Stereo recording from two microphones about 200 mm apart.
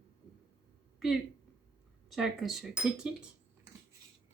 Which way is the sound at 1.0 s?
Centre (ahead or behind).